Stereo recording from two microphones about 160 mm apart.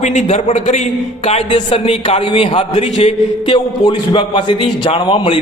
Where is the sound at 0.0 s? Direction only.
45° left (ahead or behind).